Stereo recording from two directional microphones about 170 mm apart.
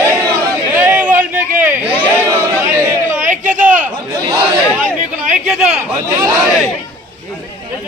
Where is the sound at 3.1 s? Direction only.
50° right (ahead or behind).